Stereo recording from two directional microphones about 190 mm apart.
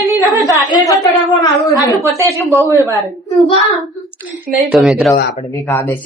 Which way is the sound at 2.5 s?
15° right (ahead or behind).